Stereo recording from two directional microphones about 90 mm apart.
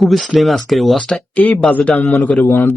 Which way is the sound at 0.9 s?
10° left (ahead or behind).